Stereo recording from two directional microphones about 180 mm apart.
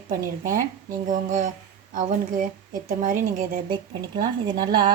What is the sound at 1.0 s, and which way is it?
Speech, 45° right (ahead or behind).